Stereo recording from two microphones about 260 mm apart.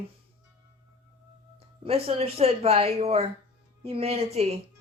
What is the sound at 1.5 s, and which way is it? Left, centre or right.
A woman's voice, right.